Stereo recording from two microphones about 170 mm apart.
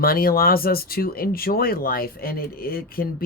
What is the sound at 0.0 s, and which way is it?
Speech, 60° left (ahead or behind).